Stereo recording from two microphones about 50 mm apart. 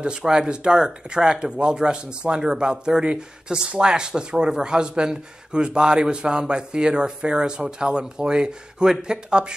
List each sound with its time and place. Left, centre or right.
0.0 s speech: centre